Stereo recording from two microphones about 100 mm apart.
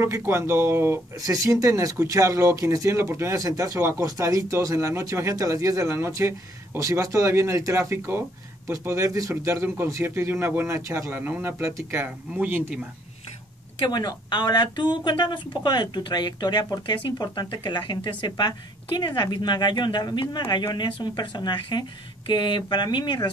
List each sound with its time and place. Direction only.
0.0 s speech: 25° right (ahead or behind)
1.2 s speech: 35° right (ahead or behind); by 12.7 s 20° right (ahead or behind)
13.8 s speech: 45° left (ahead or behind)